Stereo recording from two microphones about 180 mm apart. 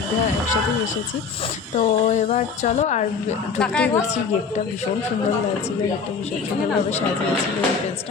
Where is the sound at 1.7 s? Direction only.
40° left (ahead or behind).